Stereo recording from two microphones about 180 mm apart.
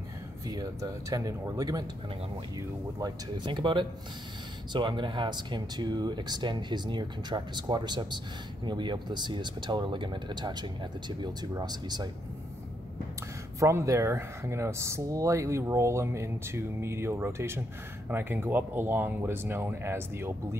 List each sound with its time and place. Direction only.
0.5 s speech: 20° right (ahead or behind)
3.0 s speech: 25° right (ahead or behind)
13.6 s speech: 15° right (ahead or behind)